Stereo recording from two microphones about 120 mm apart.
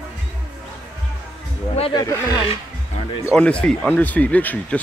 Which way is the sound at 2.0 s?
30° left (ahead or behind).